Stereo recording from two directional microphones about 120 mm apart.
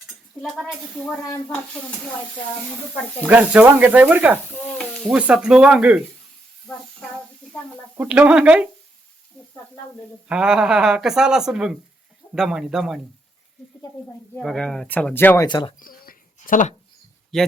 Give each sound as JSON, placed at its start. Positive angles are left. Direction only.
{"t": 0.4, "sound": "speech", "side_deg": 0}
{"t": 3.2, "sound": "speech", "side_deg": -15}
{"t": 7.9, "sound": "speech", "side_deg": -10}
{"t": 10.2, "sound": "speech", "side_deg": -5}
{"t": 14.3, "sound": "speech", "side_deg": 5}
{"t": 15.4, "sound": "speech", "side_deg": 40}
{"t": 16.5, "sound": "speech", "side_deg": 90}
{"t": 17.3, "sound": "speech", "side_deg": 5}